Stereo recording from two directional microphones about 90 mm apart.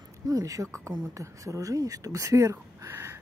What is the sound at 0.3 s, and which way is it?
Speech, 40° right (ahead or behind).